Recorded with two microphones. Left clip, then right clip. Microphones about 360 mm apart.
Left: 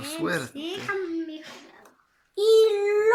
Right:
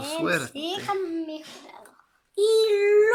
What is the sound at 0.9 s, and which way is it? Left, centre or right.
Speech, right.